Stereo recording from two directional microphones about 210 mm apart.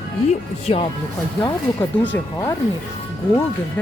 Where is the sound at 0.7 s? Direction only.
30° left (ahead or behind).